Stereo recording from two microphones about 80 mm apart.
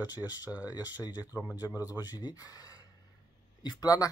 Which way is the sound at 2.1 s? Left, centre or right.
Left.